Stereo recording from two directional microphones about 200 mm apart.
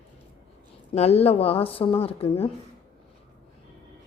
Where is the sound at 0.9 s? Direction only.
30° left (ahead or behind).